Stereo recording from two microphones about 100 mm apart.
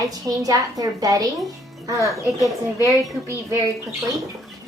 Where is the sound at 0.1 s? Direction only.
40° right (ahead or behind).